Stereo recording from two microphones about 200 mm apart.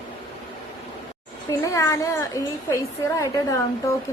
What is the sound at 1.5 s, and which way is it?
A woman's voice, 15° left (ahead or behind).